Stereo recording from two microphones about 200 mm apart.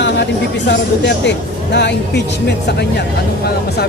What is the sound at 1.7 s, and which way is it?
Speech, 60° left (ahead or behind).